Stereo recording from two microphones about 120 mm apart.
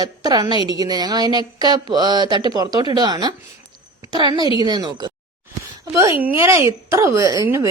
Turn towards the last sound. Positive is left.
turn(degrees=-25)  # may be behind; listen again after turning